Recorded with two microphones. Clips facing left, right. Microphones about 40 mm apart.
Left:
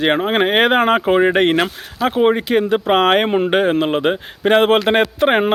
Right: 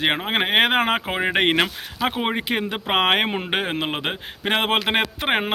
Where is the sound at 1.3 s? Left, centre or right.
Centre.